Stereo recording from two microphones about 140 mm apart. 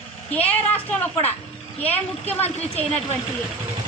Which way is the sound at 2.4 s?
50° left (ahead or behind).